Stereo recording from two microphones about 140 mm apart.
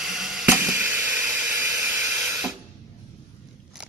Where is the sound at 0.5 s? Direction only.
15° right (ahead or behind).